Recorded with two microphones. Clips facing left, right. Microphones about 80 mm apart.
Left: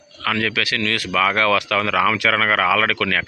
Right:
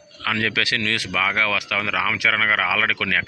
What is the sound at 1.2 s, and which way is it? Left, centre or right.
Speech, centre.